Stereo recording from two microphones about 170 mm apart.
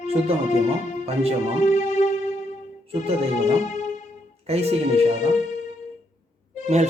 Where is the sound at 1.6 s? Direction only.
45° left (ahead or behind).